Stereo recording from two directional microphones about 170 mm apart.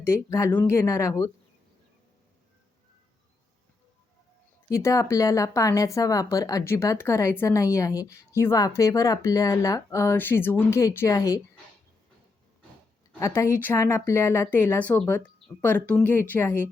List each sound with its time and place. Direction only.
0.0 s speech: 15° left (ahead or behind)
4.7 s speech: 20° left (ahead or behind)
13.1 s speech: 15° left (ahead or behind)